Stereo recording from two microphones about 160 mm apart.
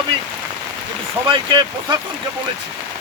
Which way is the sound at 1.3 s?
30° right (ahead or behind).